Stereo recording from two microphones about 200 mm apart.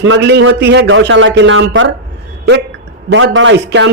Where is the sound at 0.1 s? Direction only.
60° right (ahead or behind); by 1.9 s 75° right (ahead or behind).